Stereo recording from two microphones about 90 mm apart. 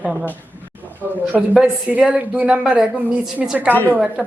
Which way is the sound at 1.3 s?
15° right (ahead or behind).